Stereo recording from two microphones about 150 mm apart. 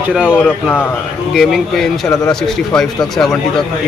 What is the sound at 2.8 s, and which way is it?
Speech, 5° left (ahead or behind).